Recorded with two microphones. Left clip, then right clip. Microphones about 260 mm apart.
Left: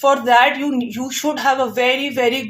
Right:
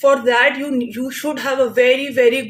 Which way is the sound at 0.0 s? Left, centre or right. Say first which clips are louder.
Even; left.